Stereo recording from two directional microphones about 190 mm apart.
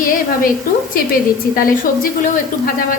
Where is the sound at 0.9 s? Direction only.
50° left (ahead or behind).